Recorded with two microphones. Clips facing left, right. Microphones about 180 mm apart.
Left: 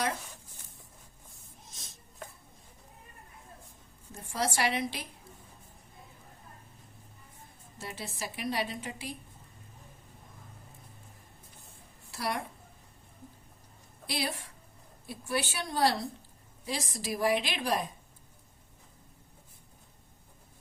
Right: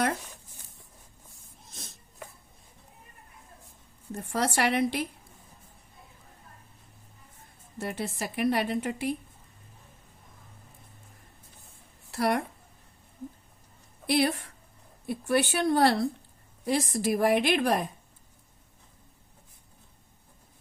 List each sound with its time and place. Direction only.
4.1 s a woman's voice: 60° right (ahead or behind)
7.8 s a woman's voice: 55° right (ahead or behind)
12.1 s a woman's voice: 60° right (ahead or behind)
14.1 s a woman's voice: 60° right (ahead or behind)